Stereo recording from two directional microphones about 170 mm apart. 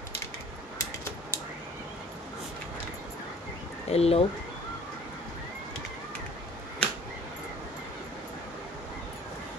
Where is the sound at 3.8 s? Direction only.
35° left (ahead or behind).